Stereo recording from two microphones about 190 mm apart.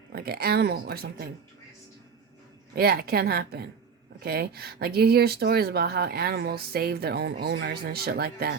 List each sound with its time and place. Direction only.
0.1 s speech: 55° right (ahead or behind)
2.7 s speech: 55° right (ahead or behind)